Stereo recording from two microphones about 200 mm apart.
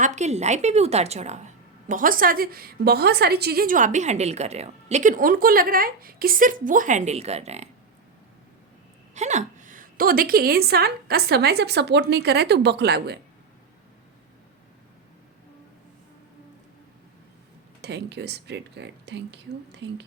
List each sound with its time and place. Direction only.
0.0 s a woman's voice: 35° right (ahead or behind)
9.1 s a woman's voice: 35° right (ahead or behind); by 13.1 s 55° right (ahead or behind)
17.8 s speech: 55° right (ahead or behind)